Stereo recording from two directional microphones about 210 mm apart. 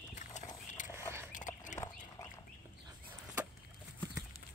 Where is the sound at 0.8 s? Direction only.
35° left (ahead or behind).